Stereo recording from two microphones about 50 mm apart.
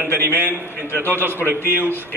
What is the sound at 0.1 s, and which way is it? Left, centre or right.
Speech, left.